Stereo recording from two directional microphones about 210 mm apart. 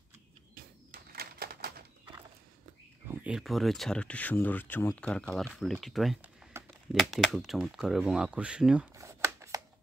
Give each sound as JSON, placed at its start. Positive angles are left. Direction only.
{"t": 0.6, "sound": "bird flight", "side_deg": -45}
{"t": 3.1, "sound": "speech", "side_deg": -5}
{"t": 8.9, "sound": "a sound", "side_deg": -15}